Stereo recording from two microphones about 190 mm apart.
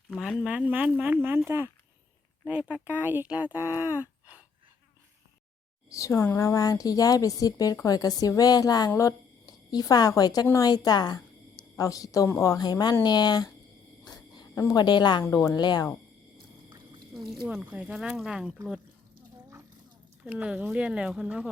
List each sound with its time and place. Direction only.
0.1 s speech: 5° right (ahead or behind)
5.9 s a woman's voice: 15° left (ahead or behind)
14.0 s a sound: 20° left (ahead or behind)
15.2 s speech: 20° left (ahead or behind)
17.2 s speech: centre (ahead or behind)
20.2 s speech: 5° right (ahead or behind)